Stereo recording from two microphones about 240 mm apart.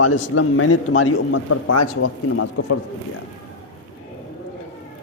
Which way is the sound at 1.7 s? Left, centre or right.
Left.